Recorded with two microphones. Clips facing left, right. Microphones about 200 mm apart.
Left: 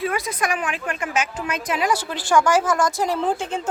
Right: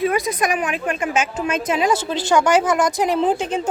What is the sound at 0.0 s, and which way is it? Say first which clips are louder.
A woman's voice: right 5 dB; 15° right (ahead or behind).